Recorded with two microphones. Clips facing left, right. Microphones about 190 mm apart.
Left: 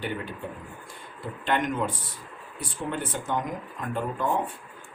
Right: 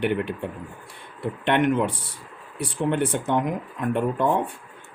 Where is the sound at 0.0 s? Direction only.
65° right (ahead or behind).